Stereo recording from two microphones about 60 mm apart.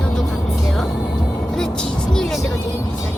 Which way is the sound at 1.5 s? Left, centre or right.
Centre.